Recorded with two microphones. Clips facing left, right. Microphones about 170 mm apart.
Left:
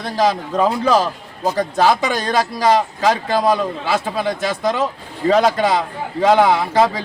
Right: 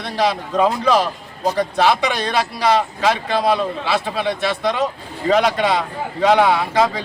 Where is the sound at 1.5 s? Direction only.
45° left (ahead or behind).